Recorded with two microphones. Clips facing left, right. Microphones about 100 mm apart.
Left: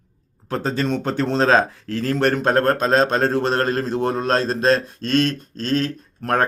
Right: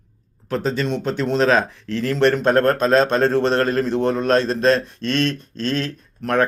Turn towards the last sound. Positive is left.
turn(degrees=40)  # may be behind; listen again after turning